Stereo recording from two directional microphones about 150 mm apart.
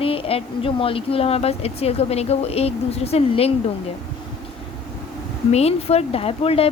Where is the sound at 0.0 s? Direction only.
40° left (ahead or behind).